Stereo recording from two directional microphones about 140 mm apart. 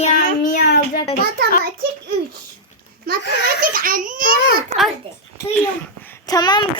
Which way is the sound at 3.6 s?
85° right.